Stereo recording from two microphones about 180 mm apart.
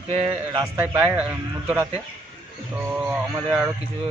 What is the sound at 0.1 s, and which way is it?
Speech, 35° right (ahead or behind).